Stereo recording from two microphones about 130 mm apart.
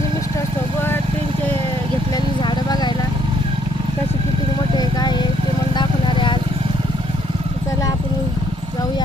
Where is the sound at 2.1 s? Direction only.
35° left (ahead or behind).